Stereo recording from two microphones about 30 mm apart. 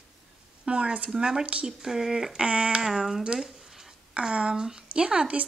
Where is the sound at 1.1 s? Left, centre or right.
Right.